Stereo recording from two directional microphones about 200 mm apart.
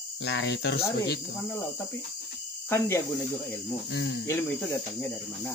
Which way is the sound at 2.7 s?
15° left (ahead or behind).